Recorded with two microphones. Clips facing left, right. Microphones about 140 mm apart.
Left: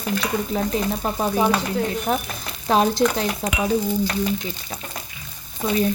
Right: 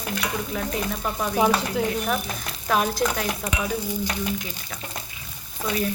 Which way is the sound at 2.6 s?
30° left (ahead or behind).